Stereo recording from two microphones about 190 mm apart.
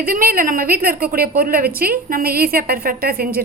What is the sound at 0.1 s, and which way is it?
A woman's voice, 50° right (ahead or behind).